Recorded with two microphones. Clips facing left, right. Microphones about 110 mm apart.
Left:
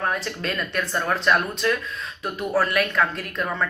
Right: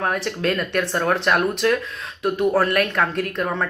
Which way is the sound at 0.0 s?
60° right (ahead or behind).